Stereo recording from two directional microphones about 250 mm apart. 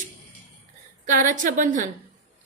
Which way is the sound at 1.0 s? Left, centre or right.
Right.